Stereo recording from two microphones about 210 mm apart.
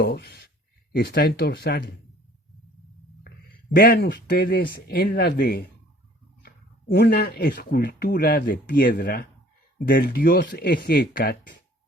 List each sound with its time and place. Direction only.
0.0 s speech: 50° left (ahead or behind)
3.8 s speech: 55° left (ahead or behind)